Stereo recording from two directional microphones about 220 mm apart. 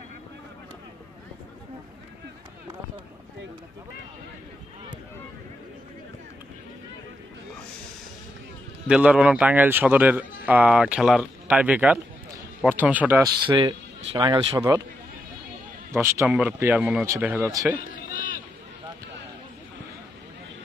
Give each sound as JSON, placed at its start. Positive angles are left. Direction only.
{"t": 8.8, "sound": "a man's voice", "side_deg": -5}
{"t": 13.5, "sound": "a man's voice", "side_deg": -20}
{"t": 15.9, "sound": "speech", "side_deg": -10}